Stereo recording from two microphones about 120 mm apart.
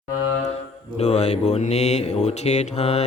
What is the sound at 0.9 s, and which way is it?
Mantra, 65° left (ahead or behind).